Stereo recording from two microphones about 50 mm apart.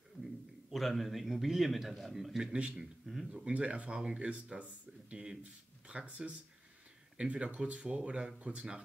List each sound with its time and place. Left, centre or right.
0.2 s a man's voice: centre; by 8.6 s right